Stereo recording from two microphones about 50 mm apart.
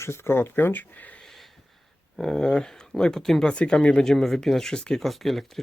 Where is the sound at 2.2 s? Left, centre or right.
Centre.